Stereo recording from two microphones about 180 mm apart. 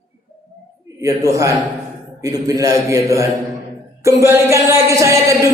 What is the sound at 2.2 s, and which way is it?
A man's voice, 20° right (ahead or behind).